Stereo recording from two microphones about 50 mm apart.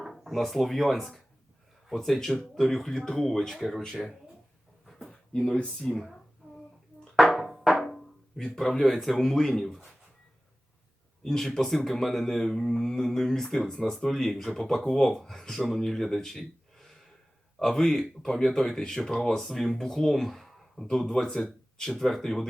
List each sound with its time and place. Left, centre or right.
0.0 s speech: centre
4.9 s a sound: centre
5.5 s speech: centre
7.2 s music: centre
8.5 s speech: centre
11.2 s speech: centre